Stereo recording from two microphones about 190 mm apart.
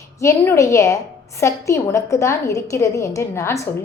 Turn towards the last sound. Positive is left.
turn(degrees=15)  # may be behind; listen again after turning